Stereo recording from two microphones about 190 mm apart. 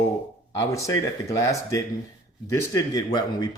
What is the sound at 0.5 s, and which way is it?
Speech, 15° left (ahead or behind).